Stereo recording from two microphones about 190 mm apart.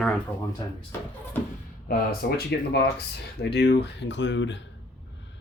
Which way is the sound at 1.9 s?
55° left (ahead or behind).